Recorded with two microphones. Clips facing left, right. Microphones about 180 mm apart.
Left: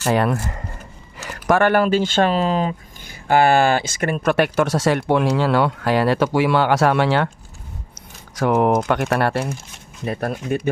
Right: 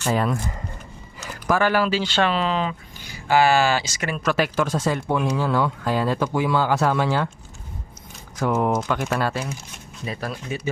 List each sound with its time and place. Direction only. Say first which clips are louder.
0.0 s speech: left 4 dB; 65° left (ahead or behind)
8.4 s speech: left 5 dB; 65° left (ahead or behind)